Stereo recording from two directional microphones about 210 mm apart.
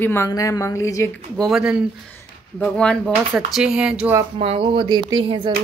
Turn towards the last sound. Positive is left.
turn(degrees=-20)  # may be behind; listen again after turning